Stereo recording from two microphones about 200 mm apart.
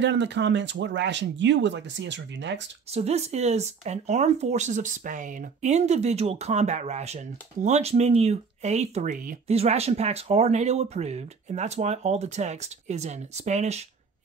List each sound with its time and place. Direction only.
0.0 s speech: 60° right (ahead or behind)
2.9 s speech: 30° right (ahead or behind)